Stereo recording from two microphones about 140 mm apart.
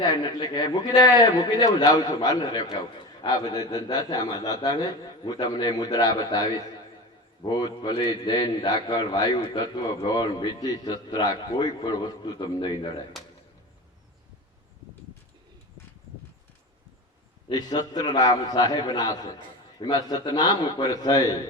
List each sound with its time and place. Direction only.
0.0 s a man's voice: 30° left (ahead or behind)
17.5 s a man's voice: 30° left (ahead or behind)